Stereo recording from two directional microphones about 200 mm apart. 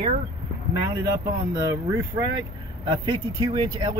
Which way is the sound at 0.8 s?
20° right (ahead or behind).